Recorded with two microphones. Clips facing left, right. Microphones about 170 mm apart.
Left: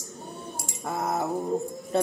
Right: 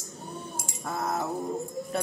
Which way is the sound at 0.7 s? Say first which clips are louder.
Left 2 dB; 20° left (ahead or behind).